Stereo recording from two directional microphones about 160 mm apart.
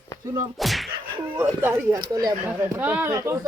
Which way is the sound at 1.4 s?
15° right (ahead or behind).